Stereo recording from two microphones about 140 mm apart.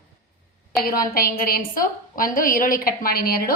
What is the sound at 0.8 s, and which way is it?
A woman's voice, 90° left.